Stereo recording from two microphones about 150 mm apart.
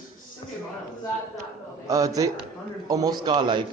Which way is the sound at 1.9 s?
20° right (ahead or behind).